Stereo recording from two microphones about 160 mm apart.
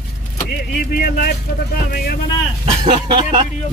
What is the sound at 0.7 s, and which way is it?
Speech, 70° left (ahead or behind).